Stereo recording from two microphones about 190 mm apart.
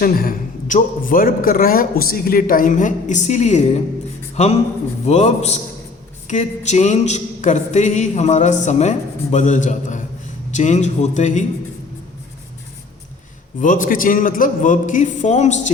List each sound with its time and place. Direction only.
0.0 s a man's voice: 50° left (ahead or behind)
4.4 s a sound: 35° left (ahead or behind)
13.6 s a man's voice: 45° left (ahead or behind)